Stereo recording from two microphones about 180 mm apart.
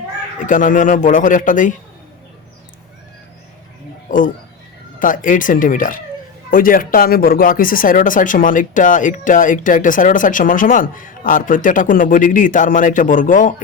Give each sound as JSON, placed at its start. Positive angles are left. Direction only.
{"t": 0.3, "sound": "speech", "side_deg": 45}
{"t": 4.1, "sound": "speech", "side_deg": 50}